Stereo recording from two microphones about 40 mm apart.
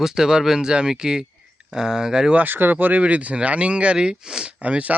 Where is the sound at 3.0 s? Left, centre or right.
Right; by 4.5 s centre.